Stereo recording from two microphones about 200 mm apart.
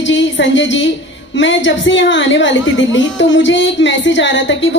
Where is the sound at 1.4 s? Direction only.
65° left (ahead or behind).